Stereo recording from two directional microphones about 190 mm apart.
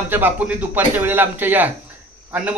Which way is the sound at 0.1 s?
10° right (ahead or behind).